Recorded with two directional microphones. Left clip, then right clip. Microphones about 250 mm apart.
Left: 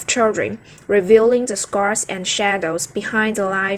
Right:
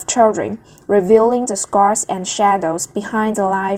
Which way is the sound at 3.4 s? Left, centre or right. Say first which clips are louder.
Right 3 dB; centre.